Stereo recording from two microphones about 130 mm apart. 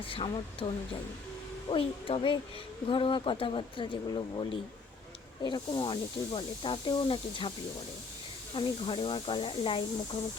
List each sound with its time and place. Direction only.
0.1 s speech: 40° left (ahead or behind)
1.7 s speech: 45° left (ahead or behind)
8.5 s speech: 40° left (ahead or behind)